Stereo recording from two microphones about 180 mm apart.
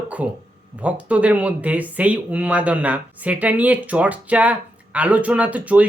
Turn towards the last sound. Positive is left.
turn(degrees=-10)  # may be behind; listen again after turning